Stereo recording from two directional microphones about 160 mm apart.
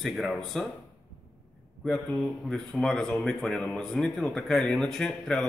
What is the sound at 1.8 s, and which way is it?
Speech, centre (ahead or behind).